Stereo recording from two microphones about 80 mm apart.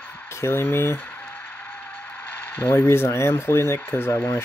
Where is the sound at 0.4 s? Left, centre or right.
Left.